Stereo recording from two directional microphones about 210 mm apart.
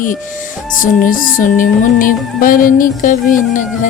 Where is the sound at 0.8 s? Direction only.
40° left (ahead or behind).